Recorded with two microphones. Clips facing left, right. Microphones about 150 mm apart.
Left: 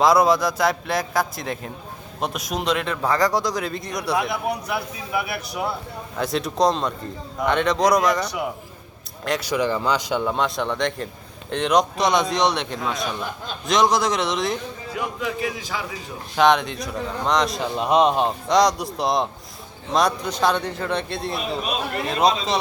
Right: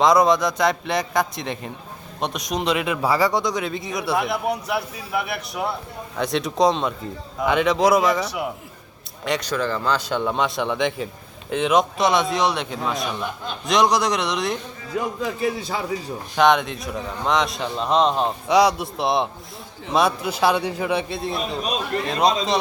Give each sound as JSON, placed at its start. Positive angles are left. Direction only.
{"t": 0.0, "sound": "speech", "side_deg": 5}
{"t": 9.5, "sound": "speech", "side_deg": 15}
{"t": 14.9, "sound": "a man's voice", "side_deg": -35}
{"t": 16.3, "sound": "speech", "side_deg": 0}